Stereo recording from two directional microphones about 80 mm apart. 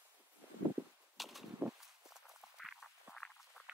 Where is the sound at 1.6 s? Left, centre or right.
Right.